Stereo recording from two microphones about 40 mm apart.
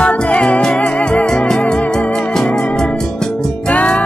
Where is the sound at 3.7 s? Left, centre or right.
Left.